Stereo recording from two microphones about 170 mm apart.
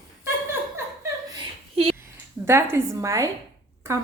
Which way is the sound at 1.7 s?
35° right (ahead or behind).